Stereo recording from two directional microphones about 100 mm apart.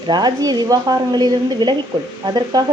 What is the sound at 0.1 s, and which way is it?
Speech, 45° right (ahead or behind).